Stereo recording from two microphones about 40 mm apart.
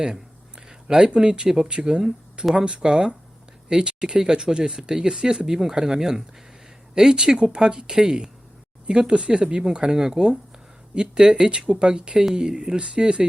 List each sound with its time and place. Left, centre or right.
0.0 s speech: centre